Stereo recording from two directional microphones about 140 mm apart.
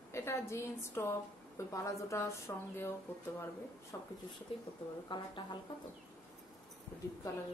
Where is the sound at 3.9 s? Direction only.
20° left (ahead or behind).